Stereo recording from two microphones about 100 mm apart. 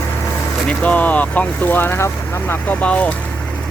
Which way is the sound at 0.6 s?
15° left (ahead or behind).